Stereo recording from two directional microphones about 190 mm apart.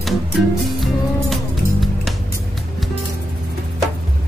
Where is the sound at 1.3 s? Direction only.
Centre (ahead or behind).